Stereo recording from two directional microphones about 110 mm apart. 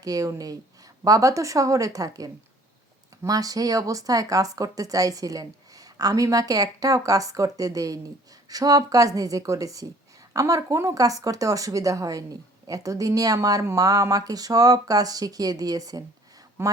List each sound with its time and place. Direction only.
0.0 s speech: 30° right (ahead or behind)